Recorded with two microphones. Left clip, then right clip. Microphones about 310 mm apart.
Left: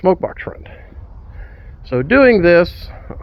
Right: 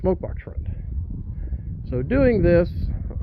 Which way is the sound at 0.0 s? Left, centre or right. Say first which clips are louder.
Left 10 dB; centre.